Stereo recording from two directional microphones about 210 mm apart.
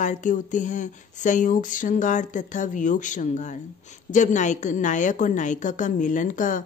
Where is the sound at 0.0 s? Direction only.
35° left (ahead or behind).